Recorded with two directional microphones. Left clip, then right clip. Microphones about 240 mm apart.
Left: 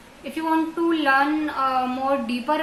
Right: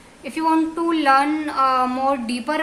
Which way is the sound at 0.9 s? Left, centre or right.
Right.